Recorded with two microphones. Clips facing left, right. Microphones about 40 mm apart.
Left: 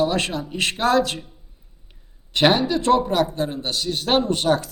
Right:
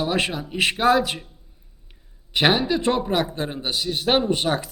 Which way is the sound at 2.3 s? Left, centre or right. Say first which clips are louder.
Left 2 dB; centre.